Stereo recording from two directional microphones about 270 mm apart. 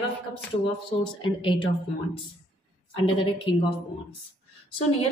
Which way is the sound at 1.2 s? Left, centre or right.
Centre.